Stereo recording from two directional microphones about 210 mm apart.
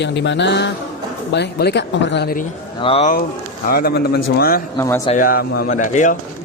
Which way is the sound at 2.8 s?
25° left (ahead or behind).